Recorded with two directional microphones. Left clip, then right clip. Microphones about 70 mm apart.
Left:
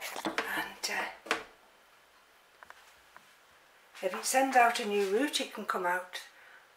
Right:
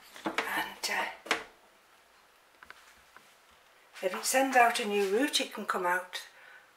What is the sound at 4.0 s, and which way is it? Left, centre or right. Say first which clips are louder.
Speech: even; centre.